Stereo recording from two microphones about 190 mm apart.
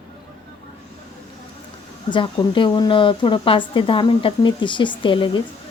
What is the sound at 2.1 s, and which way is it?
A woman's voice, 25° left (ahead or behind).